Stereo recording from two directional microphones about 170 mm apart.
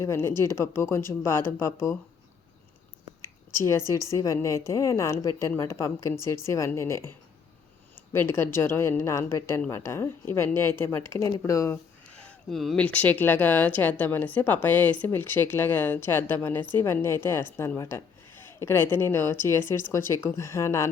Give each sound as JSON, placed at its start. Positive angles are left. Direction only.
{"t": 0.0, "sound": "a woman's voice", "side_deg": 15}
{"t": 3.6, "sound": "a woman's voice", "side_deg": 15}
{"t": 12.1, "sound": "a woman's voice", "side_deg": 5}